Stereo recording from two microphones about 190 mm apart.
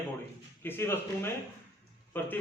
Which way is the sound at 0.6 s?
10° left (ahead or behind).